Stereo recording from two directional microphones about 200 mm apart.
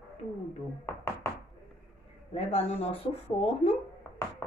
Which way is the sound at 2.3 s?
30° left (ahead or behind).